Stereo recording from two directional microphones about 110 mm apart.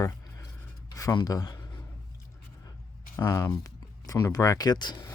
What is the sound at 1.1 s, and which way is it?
Speech, 35° left (ahead or behind).